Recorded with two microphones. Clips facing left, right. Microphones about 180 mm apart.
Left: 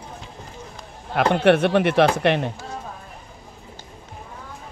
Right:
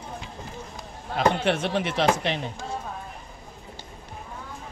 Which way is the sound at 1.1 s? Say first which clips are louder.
Left 6 dB; 60° left (ahead or behind).